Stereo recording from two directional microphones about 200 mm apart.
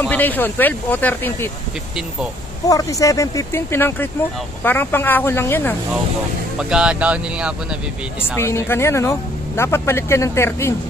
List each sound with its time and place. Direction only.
0.0 s speech: 10° left (ahead or behind)
2.7 s speech: 15° left (ahead or behind)
6.6 s speech: 5° right (ahead or behind)
8.4 s speech: 10° left (ahead or behind)